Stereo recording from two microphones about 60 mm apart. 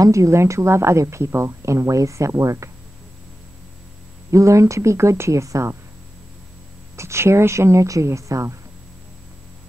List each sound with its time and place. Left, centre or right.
0.0 s a woman's voice: right
4.3 s a woman's voice: right
7.0 s a woman's voice: right